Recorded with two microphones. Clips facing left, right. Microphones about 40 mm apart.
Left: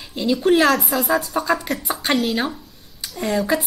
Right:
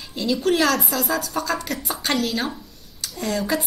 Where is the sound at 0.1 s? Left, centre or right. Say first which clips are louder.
Left 4 dB; centre.